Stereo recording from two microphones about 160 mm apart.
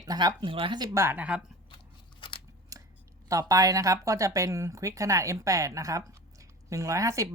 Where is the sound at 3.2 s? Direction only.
20° right (ahead or behind).